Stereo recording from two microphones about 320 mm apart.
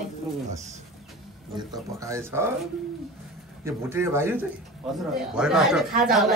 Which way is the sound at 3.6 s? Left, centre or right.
Centre.